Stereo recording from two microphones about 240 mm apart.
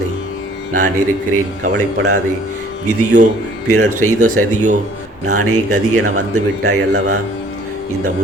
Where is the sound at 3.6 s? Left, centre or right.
Right.